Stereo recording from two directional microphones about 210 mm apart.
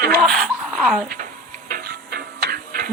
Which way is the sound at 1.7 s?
45° right (ahead or behind).